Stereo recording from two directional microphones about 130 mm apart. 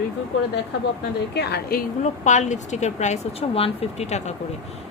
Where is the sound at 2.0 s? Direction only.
70° left (ahead or behind).